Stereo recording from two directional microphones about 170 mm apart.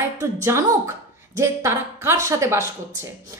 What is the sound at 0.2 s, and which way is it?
A woman's voice, 15° right (ahead or behind).